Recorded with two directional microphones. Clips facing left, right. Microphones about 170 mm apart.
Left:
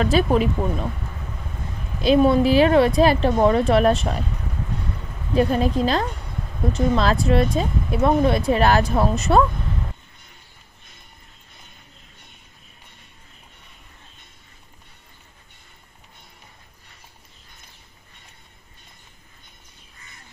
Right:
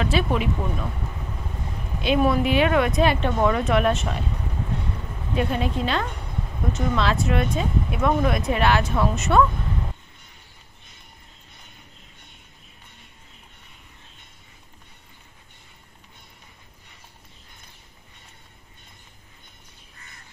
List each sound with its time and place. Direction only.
0.0 s speech: 40° left (ahead or behind)
2.0 s speech: 35° left (ahead or behind)
5.3 s speech: 40° left (ahead or behind)